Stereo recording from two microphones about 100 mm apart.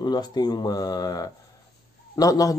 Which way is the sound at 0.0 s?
45° left (ahead or behind).